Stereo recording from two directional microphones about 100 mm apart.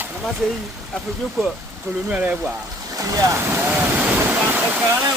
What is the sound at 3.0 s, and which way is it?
Speech, 35° right (ahead or behind).